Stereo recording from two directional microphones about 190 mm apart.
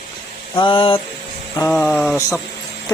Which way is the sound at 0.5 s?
25° left (ahead or behind).